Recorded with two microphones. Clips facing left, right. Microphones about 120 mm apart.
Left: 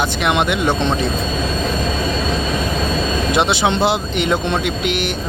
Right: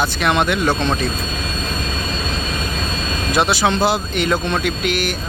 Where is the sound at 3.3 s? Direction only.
25° left (ahead or behind).